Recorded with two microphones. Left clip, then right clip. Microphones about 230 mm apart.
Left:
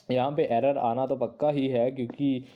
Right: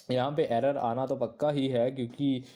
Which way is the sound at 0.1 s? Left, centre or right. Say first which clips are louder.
Left 3 dB; right.